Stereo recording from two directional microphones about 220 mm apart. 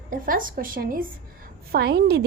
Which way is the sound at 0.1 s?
40° right (ahead or behind).